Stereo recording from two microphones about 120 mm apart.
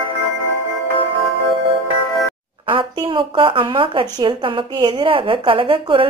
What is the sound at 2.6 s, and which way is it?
A woman's voice, 45° right (ahead or behind).